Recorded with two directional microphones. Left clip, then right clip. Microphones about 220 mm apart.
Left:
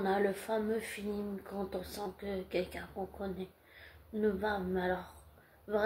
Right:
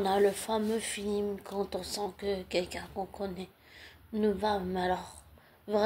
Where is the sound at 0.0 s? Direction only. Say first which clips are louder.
Right 5 dB; 40° right (ahead or behind).